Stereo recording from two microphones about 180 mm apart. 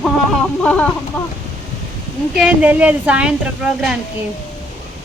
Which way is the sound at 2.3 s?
5° right (ahead or behind).